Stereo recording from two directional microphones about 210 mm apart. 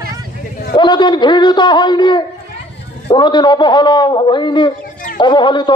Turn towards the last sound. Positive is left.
turn(degrees=20)  # may be behind; listen again after turning